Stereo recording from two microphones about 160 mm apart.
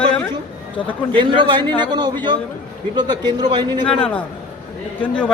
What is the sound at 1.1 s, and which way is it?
A man's voice, 30° right (ahead or behind).